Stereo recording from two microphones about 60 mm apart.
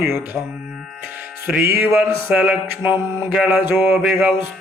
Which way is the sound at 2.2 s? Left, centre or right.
Right.